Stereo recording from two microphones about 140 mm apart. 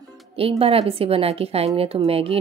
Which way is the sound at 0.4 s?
45° right (ahead or behind).